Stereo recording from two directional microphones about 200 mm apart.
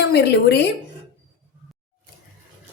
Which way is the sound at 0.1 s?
55° left (ahead or behind).